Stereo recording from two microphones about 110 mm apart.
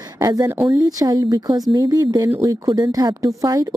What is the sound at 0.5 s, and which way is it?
Speech, 25° right (ahead or behind).